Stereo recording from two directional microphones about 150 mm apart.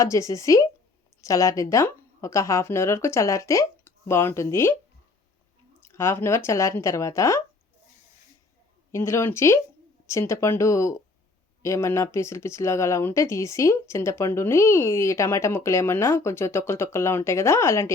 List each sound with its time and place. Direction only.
0.0 s speech: 20° left (ahead or behind)
5.8 s speech: 20° left (ahead or behind)
8.9 s speech: 20° left (ahead or behind)